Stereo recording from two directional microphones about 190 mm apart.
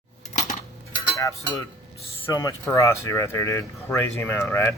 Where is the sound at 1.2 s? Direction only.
15° left (ahead or behind).